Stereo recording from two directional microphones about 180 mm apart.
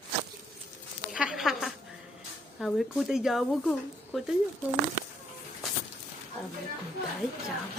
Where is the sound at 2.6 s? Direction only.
Centre (ahead or behind).